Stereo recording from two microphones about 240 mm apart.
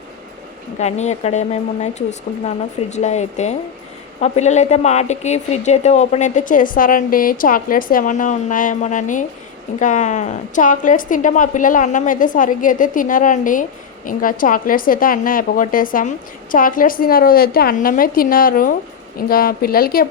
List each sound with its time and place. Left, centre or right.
0.8 s a woman's voice: left